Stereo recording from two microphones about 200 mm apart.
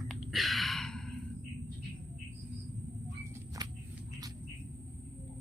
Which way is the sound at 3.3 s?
15° right (ahead or behind).